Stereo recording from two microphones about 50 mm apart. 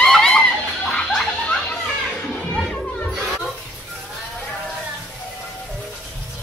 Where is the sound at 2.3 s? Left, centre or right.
Left.